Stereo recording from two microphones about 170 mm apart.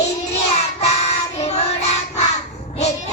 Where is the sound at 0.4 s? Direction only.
40° left (ahead or behind).